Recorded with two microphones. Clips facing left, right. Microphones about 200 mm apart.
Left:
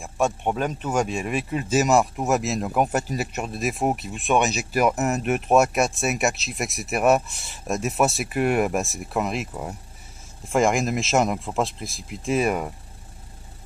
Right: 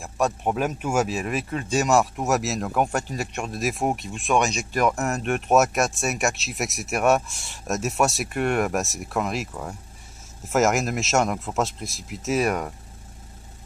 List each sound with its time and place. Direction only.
0.0 s speech: centre (ahead or behind)
9.5 s speech: 15° left (ahead or behind)
10.5 s speech: centre (ahead or behind)